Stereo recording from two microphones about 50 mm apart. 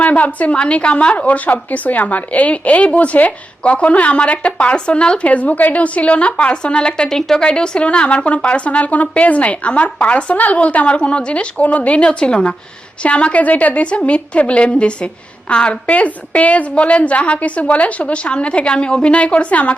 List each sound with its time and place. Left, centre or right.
0.0 s a woman's voice: left
15.9 s a woman's voice: left